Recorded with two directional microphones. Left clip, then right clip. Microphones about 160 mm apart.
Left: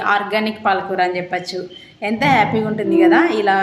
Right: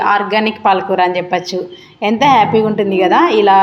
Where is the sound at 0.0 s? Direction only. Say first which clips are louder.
Right 5 dB; 15° right (ahead or behind).